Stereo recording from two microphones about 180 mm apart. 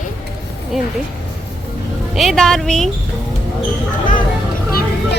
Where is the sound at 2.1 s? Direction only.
Centre (ahead or behind).